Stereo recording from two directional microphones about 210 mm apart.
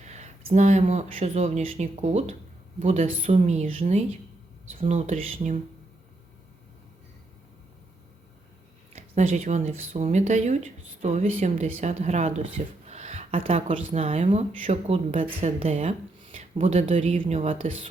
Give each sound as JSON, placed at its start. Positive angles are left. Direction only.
{"t": 0.0, "sound": "a woman's voice", "side_deg": -35}
{"t": 8.9, "sound": "a woman's voice", "side_deg": -30}